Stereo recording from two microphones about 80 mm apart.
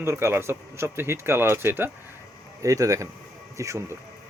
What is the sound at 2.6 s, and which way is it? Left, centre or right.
Speech, right.